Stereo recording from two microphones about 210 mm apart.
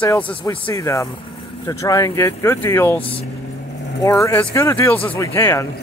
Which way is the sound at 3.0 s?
25° left (ahead or behind).